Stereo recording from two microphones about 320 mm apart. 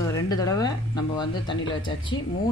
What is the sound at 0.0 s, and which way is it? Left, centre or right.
Speech, centre.